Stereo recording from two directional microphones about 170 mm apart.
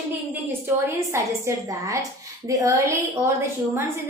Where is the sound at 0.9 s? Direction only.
15° right (ahead or behind).